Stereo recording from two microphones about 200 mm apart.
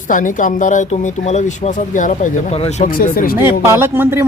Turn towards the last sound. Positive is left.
turn(degrees=-10)  # may be behind; listen again after turning